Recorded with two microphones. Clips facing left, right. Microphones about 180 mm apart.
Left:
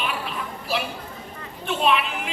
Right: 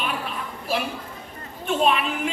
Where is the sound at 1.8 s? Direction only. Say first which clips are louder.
Even; 45° right (ahead or behind).